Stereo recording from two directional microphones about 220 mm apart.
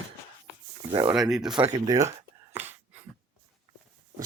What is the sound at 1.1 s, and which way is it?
Speech, centre (ahead or behind).